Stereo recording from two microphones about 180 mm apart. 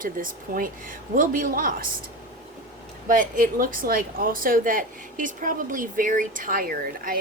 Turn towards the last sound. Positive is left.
turn(degrees=-55)  # may be behind; listen again after turning